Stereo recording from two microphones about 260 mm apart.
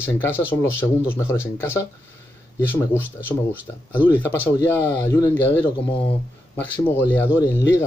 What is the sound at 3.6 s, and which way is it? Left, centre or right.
Speech, centre.